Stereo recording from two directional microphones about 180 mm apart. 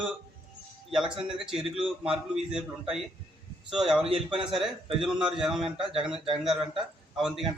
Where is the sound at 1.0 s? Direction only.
30° right (ahead or behind).